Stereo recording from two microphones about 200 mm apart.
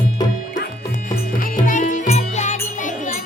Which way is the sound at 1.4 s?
40° left (ahead or behind).